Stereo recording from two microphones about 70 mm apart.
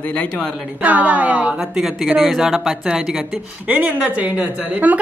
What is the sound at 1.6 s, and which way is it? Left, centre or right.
Speech, centre.